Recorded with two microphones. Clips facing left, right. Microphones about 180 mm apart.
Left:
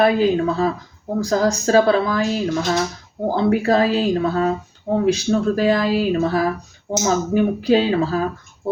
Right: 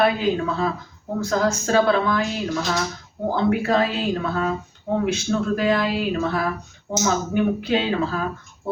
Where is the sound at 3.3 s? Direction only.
35° left (ahead or behind).